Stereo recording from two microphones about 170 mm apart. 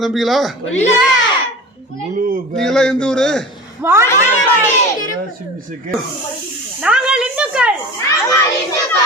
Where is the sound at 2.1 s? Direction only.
55° right (ahead or behind).